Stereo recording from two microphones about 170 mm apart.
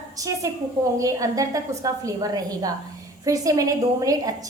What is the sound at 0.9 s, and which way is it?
A woman's voice, 20° right (ahead or behind).